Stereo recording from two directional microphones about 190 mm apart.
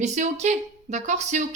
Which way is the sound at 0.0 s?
35° right (ahead or behind).